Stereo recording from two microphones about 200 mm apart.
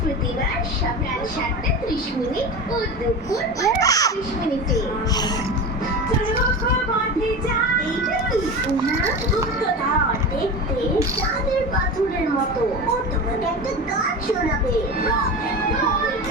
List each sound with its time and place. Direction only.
3.6 s a child's voice: 15° left (ahead or behind)